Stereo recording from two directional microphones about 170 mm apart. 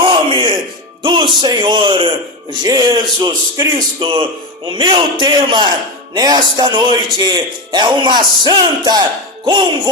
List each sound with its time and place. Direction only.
0.0 s music: 30° right (ahead or behind)
1.0 s a man's voice: 30° right (ahead or behind)